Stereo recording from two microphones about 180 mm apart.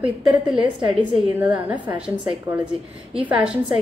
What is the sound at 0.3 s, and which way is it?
A woman's voice, 10° right (ahead or behind).